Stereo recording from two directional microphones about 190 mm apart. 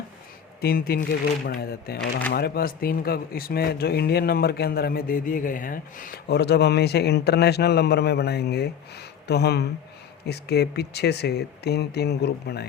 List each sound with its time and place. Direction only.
0.6 s speech: 55° left (ahead or behind)